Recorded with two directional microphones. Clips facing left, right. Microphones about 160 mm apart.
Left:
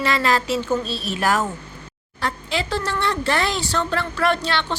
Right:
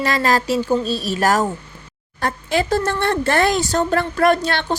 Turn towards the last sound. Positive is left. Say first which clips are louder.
# right 4 dB
turn(degrees=-45)  # may be behind; listen again after turning